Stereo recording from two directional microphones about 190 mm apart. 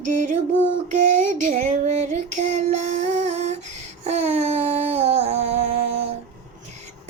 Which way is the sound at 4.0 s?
35° right (ahead or behind).